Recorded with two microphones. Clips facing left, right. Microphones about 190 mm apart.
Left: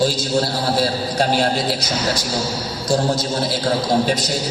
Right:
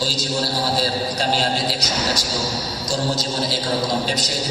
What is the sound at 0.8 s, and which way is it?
Speech, 55° left (ahead or behind).